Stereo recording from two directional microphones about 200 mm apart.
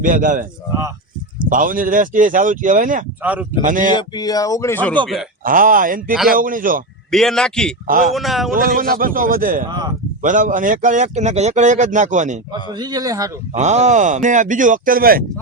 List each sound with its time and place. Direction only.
0.0 s a man's voice: 40° right (ahead or behind)
1.5 s a man's voice: 40° right (ahead or behind)
3.2 s a man's voice: 10° right (ahead or behind)
3.7 s a man's voice: 40° right (ahead or behind)
3.9 s speech: 20° left (ahead or behind)
5.5 s a man's voice: 45° right (ahead or behind)
7.1 s a man's voice: centre (ahead or behind)
8.5 s a man's voice: 45° right (ahead or behind)
9.6 s speech: 20° right (ahead or behind)
10.2 s a man's voice: 40° right (ahead or behind)
12.7 s a man's voice: 20° right (ahead or behind)
13.5 s a man's voice: 35° right (ahead or behind)